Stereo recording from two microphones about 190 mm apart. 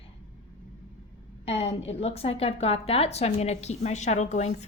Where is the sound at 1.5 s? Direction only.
35° left (ahead or behind).